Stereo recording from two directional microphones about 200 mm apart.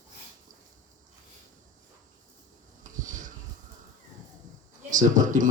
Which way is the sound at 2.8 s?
40° right (ahead or behind).